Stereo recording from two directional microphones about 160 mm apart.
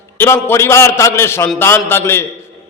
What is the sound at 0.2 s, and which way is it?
A man's voice, 15° left (ahead or behind).